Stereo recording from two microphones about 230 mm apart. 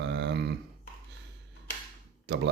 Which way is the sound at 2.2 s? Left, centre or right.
Right.